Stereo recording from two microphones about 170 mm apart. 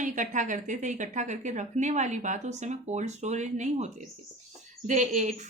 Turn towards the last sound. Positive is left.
turn(degrees=-45)  # may be behind; listen again after turning